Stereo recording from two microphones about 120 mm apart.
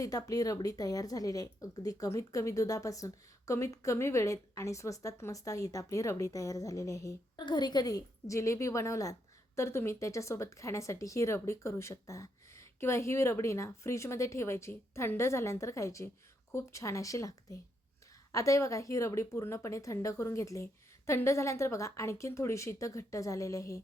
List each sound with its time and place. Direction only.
0.0 s a woman's voice: 30° left (ahead or behind)
7.3 s a woman's voice: 40° left (ahead or behind)